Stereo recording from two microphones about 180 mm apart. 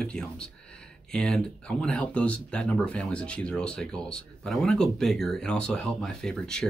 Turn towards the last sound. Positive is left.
turn(degrees=5)  # may be behind; listen again after turning